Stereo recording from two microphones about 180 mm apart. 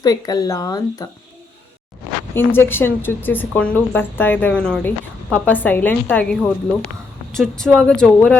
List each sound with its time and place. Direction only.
0.0 s speech: 20° left (ahead or behind)
2.3 s speech: 10° left (ahead or behind)